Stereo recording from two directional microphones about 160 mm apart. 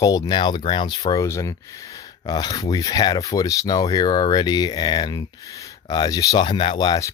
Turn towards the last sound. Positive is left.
turn(degrees=30)  # may be behind; listen again after turning